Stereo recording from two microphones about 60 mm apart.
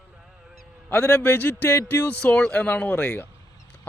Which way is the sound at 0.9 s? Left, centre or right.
Left.